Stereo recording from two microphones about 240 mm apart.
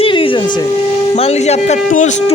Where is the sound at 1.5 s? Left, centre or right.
Left.